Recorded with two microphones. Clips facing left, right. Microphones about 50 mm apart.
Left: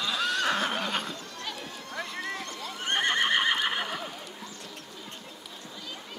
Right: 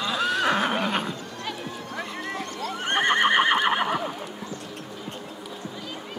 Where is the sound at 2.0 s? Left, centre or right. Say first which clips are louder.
Right 1 dB; centre.